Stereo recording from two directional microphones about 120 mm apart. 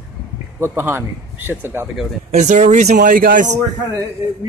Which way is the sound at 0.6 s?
20° right (ahead or behind).